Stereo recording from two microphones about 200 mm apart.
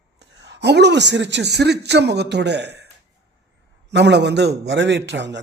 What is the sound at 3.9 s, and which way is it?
Speech, 60° right (ahead or behind).